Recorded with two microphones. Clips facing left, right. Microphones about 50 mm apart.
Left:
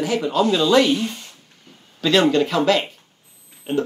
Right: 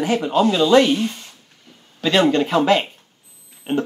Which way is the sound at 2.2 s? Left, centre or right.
Centre.